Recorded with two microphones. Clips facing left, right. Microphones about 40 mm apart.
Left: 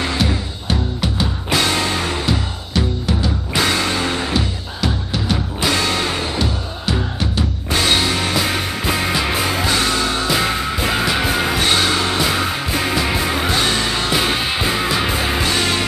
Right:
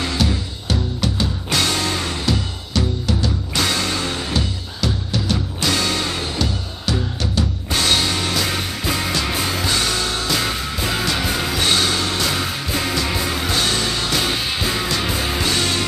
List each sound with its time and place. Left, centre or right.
0.0 s music: centre